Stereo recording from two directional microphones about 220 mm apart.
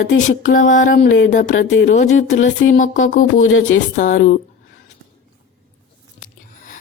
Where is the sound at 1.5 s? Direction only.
55° left (ahead or behind).